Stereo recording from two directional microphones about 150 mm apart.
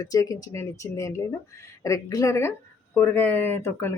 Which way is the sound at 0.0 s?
25° left (ahead or behind).